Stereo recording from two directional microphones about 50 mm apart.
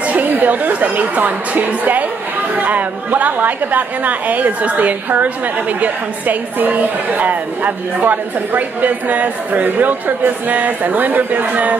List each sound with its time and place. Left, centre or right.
0.0 s a woman's voice: right